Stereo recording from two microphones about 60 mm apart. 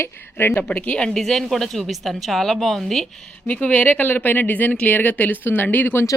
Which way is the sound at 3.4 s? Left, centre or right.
Left.